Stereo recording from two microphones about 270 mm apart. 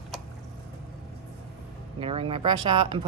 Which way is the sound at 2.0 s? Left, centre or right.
Centre.